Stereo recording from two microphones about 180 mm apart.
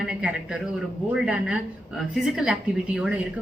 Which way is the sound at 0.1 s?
5° right (ahead or behind).